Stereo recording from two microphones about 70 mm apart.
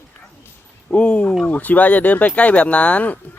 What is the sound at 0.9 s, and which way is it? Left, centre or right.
Speech, centre.